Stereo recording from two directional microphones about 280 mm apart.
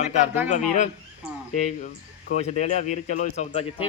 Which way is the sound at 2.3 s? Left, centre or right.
Left.